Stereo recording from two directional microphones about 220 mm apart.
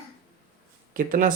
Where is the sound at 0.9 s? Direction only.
40° right (ahead or behind).